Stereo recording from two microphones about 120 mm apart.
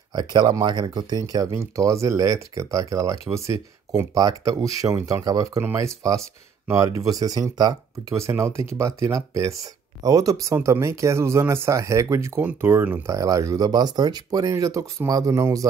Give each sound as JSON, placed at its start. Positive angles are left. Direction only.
{"t": 0.1, "sound": "speech", "side_deg": -35}
{"t": 7.2, "sound": "speech", "side_deg": -30}